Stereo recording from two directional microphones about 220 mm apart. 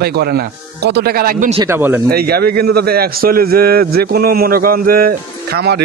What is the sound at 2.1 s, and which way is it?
A man's voice, 45° right (ahead or behind).